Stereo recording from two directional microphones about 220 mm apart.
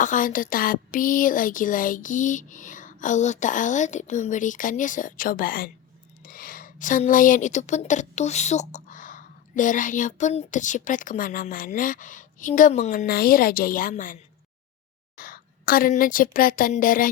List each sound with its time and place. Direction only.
0.0 s a woman's voice: 35° left (ahead or behind)
15.2 s a woman's voice: 40° left (ahead or behind)